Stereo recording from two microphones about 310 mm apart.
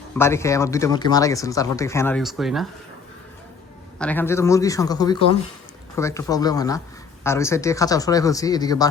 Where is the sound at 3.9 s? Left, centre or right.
Centre.